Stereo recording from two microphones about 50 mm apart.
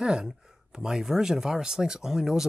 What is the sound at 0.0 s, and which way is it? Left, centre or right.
Speech, centre.